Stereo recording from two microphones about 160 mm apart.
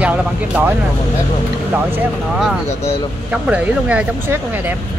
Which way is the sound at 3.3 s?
10° right (ahead or behind).